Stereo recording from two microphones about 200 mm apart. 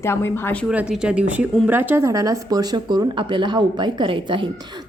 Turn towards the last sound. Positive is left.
turn(degrees=-25)  # may be behind; listen again after turning